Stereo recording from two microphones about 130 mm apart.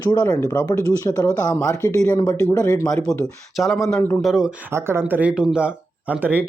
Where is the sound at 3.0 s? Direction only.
5° left (ahead or behind).